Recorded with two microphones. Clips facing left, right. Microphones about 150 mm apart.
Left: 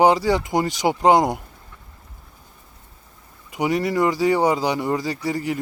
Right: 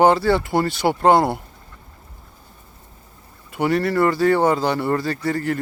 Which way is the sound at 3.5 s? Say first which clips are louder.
Right 2 dB; 15° left (ahead or behind).